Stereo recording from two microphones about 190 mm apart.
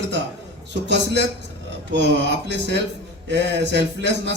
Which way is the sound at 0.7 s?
65° right (ahead or behind).